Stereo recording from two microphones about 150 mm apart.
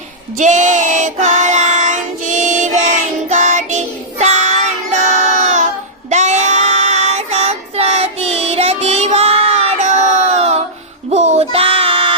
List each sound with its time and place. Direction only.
0.3 s child singing: 55° right (ahead or behind)
11.1 s music: 45° right (ahead or behind)